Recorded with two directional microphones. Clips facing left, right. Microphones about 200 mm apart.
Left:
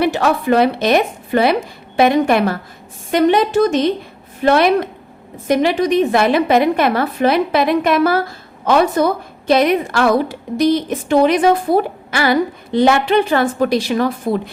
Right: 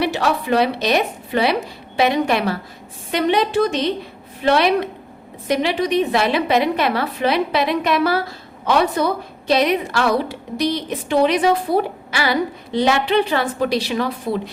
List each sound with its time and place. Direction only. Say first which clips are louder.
0.0 s a woman's voice: left 4 dB; 50° left (ahead or behind)